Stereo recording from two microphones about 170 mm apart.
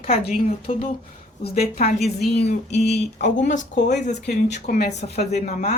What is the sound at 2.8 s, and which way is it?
Speech, 75° left (ahead or behind).